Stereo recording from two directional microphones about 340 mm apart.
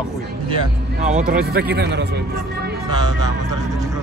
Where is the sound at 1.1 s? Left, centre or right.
Right.